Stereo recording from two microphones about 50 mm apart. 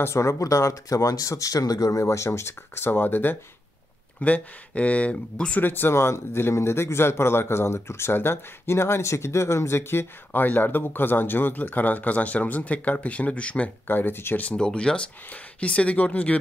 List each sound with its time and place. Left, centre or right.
0.0 s speech: left
4.2 s speech: left
5.6 s speech: left
10.4 s speech: left
13.8 s speech: left
14.4 s speech: centre